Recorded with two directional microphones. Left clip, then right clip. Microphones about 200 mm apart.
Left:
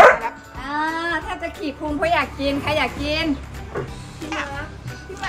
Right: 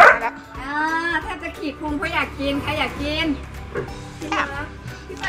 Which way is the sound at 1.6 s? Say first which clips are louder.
Left 4 dB; centre (ahead or behind).